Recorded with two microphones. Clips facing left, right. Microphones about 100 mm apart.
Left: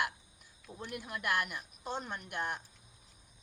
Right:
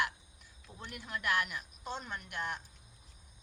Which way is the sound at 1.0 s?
45° left (ahead or behind).